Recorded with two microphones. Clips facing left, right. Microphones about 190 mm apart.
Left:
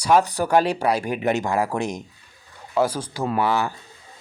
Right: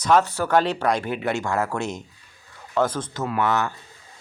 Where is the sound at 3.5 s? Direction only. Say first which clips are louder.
Left 1 dB; 10° left (ahead or behind).